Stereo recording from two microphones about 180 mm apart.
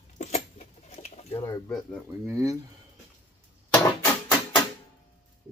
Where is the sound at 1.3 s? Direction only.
15° left (ahead or behind).